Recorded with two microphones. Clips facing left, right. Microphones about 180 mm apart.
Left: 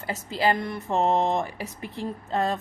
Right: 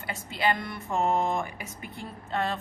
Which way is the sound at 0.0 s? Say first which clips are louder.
Left 4 dB; 35° left (ahead or behind).